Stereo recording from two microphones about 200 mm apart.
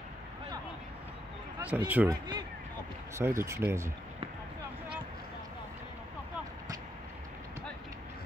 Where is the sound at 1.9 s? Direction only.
10° right (ahead or behind).